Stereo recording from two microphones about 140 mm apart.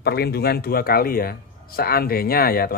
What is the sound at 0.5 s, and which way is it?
Speech, 90° left.